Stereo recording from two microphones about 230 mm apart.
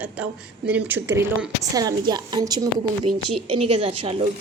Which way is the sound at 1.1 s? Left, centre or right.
Centre.